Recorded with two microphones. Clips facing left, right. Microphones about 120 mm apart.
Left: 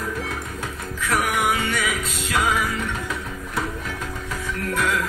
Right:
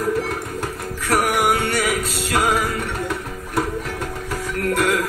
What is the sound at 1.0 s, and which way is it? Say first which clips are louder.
Music: right 4 dB; 60° right (ahead or behind).